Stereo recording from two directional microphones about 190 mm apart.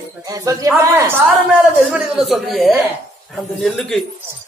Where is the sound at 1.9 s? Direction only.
Centre (ahead or behind).